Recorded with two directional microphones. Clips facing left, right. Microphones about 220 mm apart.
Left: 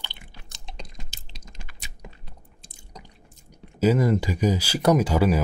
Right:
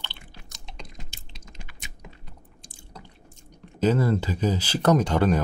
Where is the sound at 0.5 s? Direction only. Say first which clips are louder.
Left 2 dB; 35° left (ahead or behind).